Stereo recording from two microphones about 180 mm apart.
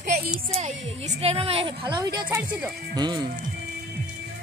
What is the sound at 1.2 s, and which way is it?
Speech, 35° right (ahead or behind).